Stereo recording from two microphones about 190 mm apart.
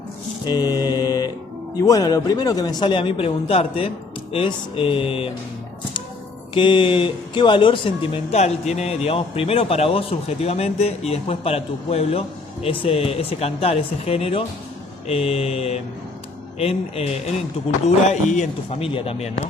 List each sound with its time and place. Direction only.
0.4 s mantra: 20° left (ahead or behind)
1.8 s a man's voice: 20° left (ahead or behind)
6.5 s speech: 25° left (ahead or behind)